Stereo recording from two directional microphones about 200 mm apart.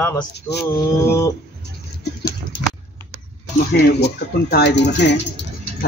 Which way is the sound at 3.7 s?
55° left (ahead or behind).